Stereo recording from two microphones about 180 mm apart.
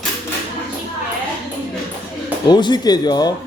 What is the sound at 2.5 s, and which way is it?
Speech, 25° left (ahead or behind).